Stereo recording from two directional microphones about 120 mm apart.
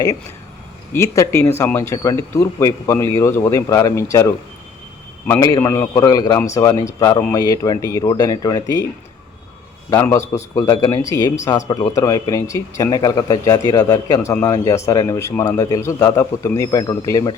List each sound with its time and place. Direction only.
0.9 s a man's voice: 25° left (ahead or behind)
5.4 s a man's voice: 25° left (ahead or behind)
9.9 s a man's voice: 25° left (ahead or behind)